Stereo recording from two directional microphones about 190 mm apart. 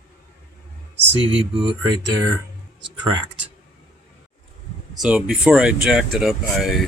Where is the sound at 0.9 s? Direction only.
75° right (ahead or behind).